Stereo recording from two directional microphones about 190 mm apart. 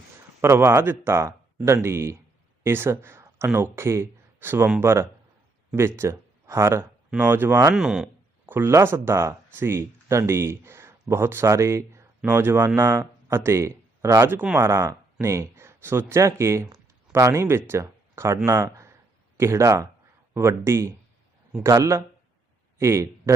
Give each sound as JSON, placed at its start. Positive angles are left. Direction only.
{"t": 0.4, "sound": "speech", "side_deg": -15}